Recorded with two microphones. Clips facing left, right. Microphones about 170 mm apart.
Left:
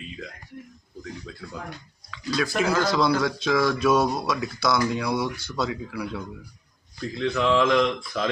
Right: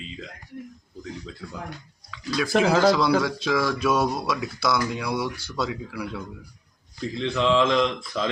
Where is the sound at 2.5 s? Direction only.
90° right.